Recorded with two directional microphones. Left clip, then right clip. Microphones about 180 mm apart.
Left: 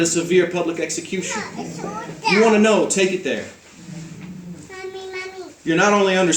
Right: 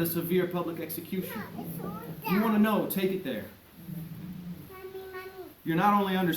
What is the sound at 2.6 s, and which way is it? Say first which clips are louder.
Speech: left 12 dB; 15° right (ahead or behind).